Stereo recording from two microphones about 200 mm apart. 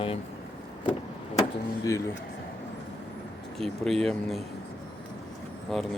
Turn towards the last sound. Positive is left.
turn(degrees=0)  # may be behind; listen again after turning